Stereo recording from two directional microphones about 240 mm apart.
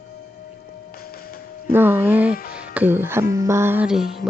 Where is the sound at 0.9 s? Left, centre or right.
Left.